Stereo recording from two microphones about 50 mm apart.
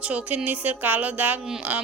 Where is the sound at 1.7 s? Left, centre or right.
Right.